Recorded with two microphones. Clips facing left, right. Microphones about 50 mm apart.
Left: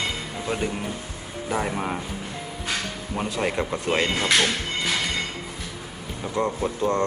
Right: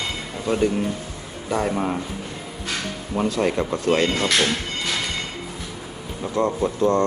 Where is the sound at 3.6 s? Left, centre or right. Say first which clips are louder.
Right 4 dB; centre.